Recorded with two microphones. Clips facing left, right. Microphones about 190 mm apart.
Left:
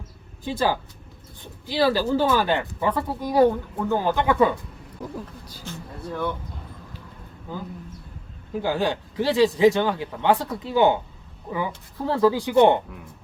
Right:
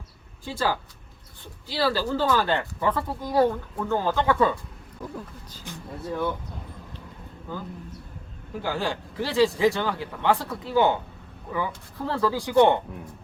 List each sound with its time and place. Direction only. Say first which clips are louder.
0.4 s speech: left 3 dB; 20° left (ahead or behind)
8.6 s speech: left 4 dB; 20° left (ahead or behind)